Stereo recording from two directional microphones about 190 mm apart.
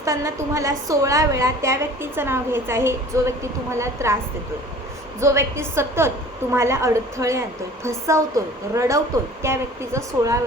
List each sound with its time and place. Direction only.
0.0 s a woman's voice: 15° right (ahead or behind)
5.2 s a woman's voice: 15° right (ahead or behind)